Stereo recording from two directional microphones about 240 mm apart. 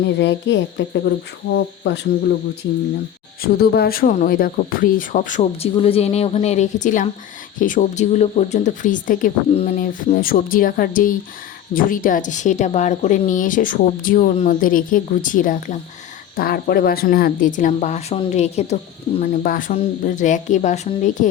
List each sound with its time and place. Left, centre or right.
0.0 s speech: left
3.4 s speech: left